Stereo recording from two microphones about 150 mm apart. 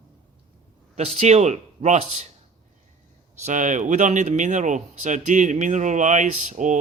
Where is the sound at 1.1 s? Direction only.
45° right (ahead or behind).